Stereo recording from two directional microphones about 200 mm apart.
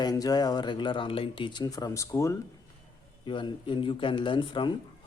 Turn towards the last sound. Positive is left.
turn(degrees=25)  # may be behind; listen again after turning